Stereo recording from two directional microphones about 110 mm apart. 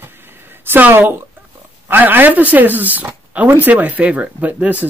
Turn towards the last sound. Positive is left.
turn(degrees=-15)  # may be behind; listen again after turning